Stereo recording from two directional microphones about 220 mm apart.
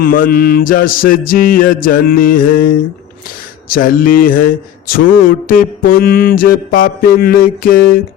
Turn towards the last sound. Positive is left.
turn(degrees=40)  # may be behind; listen again after turning